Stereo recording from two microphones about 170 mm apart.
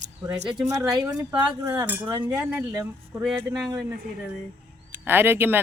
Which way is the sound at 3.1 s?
5° right (ahead or behind).